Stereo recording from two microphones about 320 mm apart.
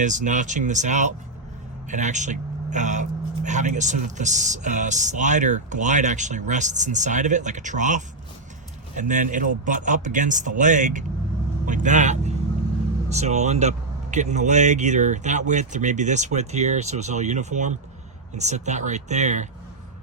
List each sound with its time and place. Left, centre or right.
0.0 s speech: right